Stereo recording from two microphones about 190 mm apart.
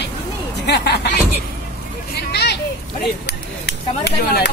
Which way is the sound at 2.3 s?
60° left (ahead or behind).